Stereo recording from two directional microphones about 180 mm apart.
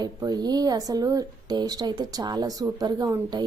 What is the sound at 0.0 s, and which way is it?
A woman's voice, 20° right (ahead or behind).